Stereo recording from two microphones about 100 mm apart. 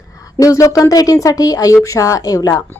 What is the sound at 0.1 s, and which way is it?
Speech, 35° left (ahead or behind).